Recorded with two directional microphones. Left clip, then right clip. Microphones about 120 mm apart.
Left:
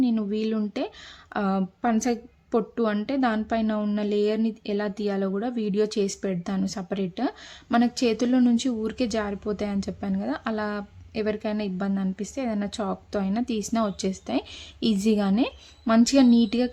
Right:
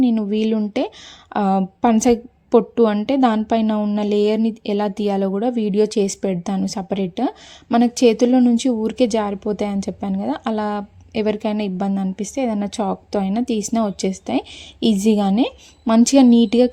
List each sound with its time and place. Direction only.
0.0 s a woman's voice: 35° right (ahead or behind)